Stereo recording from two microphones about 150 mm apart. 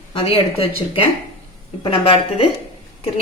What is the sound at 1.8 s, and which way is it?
Speech, 35° left (ahead or behind).